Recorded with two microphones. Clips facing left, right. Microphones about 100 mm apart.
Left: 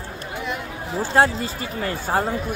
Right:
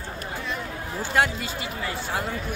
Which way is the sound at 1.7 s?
45° left (ahead or behind).